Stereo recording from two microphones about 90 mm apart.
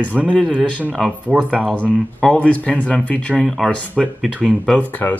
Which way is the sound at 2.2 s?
15° left (ahead or behind).